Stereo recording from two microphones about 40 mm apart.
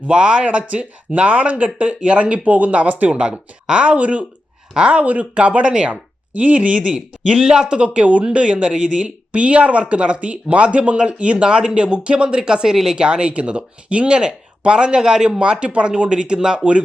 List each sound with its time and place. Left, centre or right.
0.1 s speech: right
6.3 s speech: right
7.3 s speech: centre
7.8 s speech: right